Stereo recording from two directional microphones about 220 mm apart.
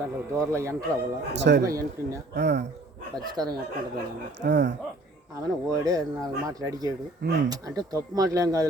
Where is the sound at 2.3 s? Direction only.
50° right (ahead or behind).